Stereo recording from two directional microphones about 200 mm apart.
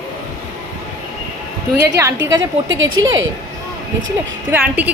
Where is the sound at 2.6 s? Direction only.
70° right (ahead or behind).